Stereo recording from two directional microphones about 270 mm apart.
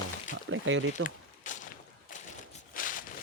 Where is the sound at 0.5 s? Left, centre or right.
Right.